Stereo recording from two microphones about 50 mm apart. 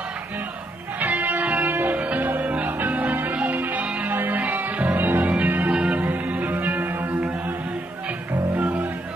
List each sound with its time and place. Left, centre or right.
1.0 s music: right
5.7 s music: right
5.9 s music: right
8.5 s music: right